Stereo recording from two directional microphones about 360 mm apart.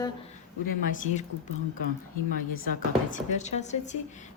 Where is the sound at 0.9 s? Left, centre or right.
Left.